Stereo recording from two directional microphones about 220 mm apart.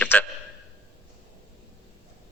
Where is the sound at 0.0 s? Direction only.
5° left (ahead or behind).